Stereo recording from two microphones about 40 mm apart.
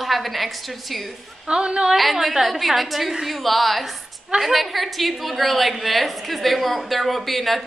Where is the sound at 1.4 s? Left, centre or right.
Right.